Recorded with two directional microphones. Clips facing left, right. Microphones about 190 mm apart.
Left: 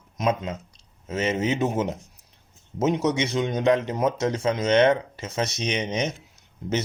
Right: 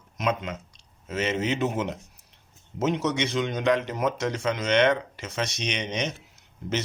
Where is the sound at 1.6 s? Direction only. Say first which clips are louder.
Left 2 dB; 40° left (ahead or behind).